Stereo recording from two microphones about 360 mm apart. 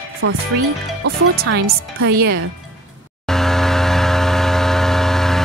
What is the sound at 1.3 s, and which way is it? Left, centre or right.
Speech, right.